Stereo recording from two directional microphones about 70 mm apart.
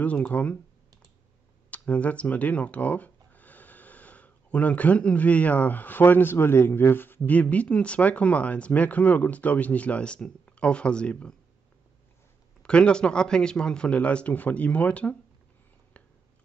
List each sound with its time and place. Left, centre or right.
0.0 s speech: centre
1.7 s speech: centre
12.6 s speech: centre